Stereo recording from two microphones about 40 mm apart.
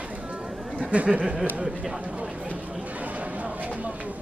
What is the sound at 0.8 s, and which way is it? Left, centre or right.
Speech, right.